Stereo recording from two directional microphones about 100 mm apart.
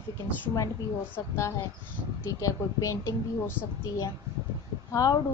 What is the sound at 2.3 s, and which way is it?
Speech, 35° left (ahead or behind).